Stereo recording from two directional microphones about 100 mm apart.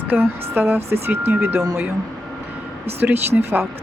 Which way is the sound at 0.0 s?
20° right (ahead or behind).